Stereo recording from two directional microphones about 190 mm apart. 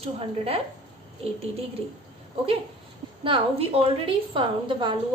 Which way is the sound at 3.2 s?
30° right (ahead or behind).